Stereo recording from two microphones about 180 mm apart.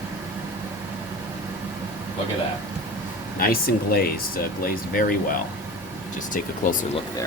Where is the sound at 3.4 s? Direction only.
55° left (ahead or behind).